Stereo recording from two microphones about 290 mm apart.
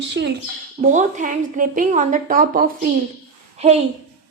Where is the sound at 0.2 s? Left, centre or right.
Right.